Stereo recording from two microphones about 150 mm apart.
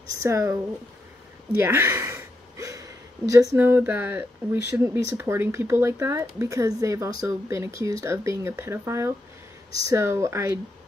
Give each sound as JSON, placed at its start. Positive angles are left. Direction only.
{"t": 0.2, "sound": "speech", "side_deg": -20}
{"t": 1.6, "sound": "speech", "side_deg": -15}